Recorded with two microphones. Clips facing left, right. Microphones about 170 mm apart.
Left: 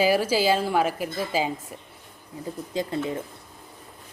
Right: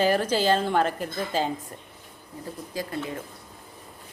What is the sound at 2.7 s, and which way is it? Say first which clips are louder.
Speech: left 4 dB; 20° left (ahead or behind).